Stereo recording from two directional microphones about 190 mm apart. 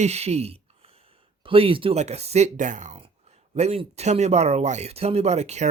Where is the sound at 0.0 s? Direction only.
35° right (ahead or behind).